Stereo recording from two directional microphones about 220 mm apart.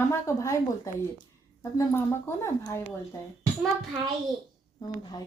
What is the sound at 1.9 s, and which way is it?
Speech, 10° left (ahead or behind).